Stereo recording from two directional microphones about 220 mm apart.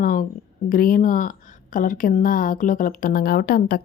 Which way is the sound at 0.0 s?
40° left (ahead or behind).